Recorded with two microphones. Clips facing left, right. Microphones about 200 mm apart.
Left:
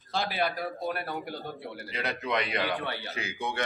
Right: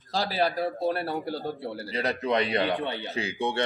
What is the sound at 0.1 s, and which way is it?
A man's voice, 35° right (ahead or behind).